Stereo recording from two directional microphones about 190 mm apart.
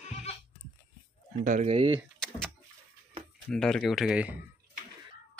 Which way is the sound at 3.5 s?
5° left (ahead or behind).